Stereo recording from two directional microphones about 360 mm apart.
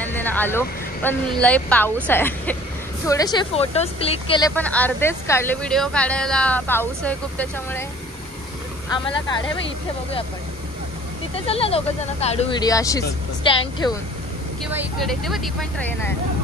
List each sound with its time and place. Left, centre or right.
0.0 s vehicle: centre
1.4 s speech: centre
11.3 s speech: centre
14.7 s speech: centre